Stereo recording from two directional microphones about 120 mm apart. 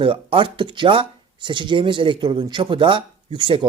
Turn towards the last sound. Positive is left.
turn(degrees=-45)  # may be behind; listen again after turning